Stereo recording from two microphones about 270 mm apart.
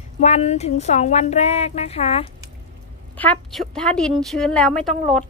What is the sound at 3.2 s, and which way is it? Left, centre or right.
A woman's voice, centre.